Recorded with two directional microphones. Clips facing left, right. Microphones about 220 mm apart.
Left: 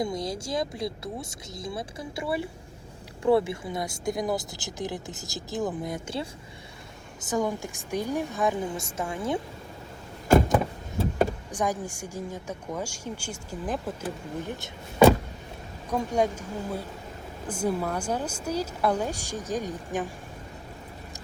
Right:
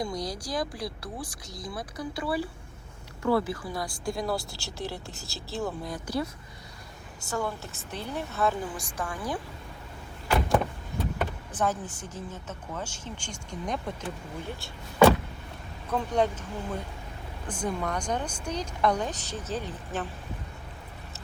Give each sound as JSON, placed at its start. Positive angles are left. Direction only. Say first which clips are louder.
{"t": 0.0, "sound": "speech", "louder": "left 3 dB", "side_deg": 25}
{"t": 10.5, "sound": "door", "louder": "left 1 dB", "side_deg": 25}
{"t": 11.5, "sound": "speech", "louder": "right 2 dB", "side_deg": 15}
{"t": 14.4, "sound": "speech", "louder": "left 3 dB", "side_deg": 20}